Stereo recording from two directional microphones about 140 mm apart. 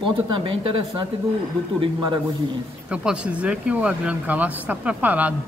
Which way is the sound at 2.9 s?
5° right (ahead or behind).